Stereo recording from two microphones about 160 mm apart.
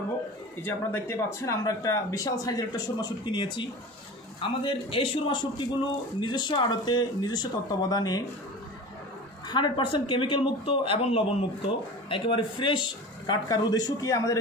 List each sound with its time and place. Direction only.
0.6 s a man's voice: 15° left (ahead or behind)
9.5 s a man's voice: 30° left (ahead or behind)